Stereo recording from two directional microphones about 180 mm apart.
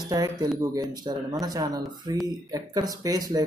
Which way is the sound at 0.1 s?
20° right (ahead or behind).